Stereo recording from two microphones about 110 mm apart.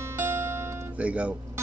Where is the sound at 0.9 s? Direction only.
10° right (ahead or behind).